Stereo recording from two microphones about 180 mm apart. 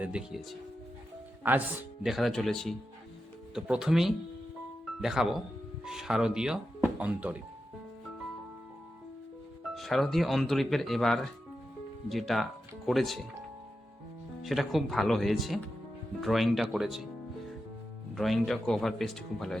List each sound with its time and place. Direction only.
0.0 s speech: 5° right (ahead or behind)
1.5 s speech: 10° right (ahead or behind)
2.0 s speech: centre (ahead or behind)
9.7 s speech: centre (ahead or behind)
14.4 s speech: centre (ahead or behind)
18.1 s speech: centre (ahead or behind)